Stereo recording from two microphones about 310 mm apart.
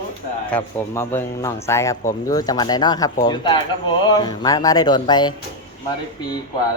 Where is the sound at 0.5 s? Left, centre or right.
Centre.